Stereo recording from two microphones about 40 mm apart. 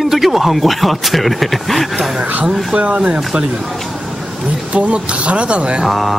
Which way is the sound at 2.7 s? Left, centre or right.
Right.